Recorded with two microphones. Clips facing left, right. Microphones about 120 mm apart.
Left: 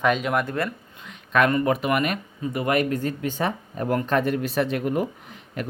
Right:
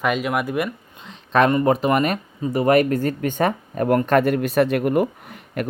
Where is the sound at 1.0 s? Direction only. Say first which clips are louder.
Right 3 dB; 30° right (ahead or behind); by 5.6 s 60° right (ahead or behind).